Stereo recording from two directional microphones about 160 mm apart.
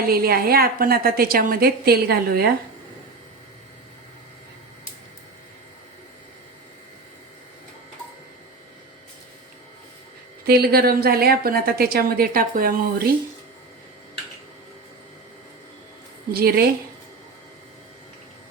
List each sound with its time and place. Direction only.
0.0 s a woman's voice: 70° right (ahead or behind)
10.4 s a woman's voice: 75° right (ahead or behind)
16.3 s a woman's voice: 75° right (ahead or behind)